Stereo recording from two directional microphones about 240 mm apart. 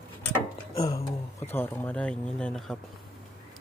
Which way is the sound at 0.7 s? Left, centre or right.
Centre.